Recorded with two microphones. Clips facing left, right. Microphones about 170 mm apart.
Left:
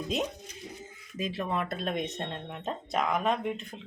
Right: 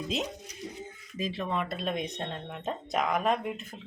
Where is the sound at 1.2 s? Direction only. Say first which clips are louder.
Even; centre (ahead or behind).